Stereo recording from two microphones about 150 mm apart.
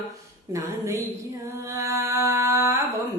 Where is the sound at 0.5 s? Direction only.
20° right (ahead or behind).